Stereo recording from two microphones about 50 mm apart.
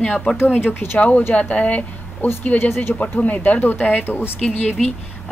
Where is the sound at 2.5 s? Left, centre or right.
Left.